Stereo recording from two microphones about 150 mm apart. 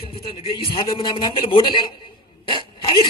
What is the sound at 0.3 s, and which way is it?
Speech, 35° left (ahead or behind).